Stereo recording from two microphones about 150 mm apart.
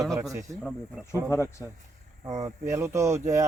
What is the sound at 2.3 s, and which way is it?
Speech, 20° right (ahead or behind).